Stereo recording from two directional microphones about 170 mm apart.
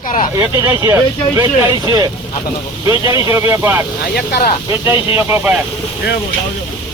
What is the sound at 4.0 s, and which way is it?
Speech, 65° left (ahead or behind).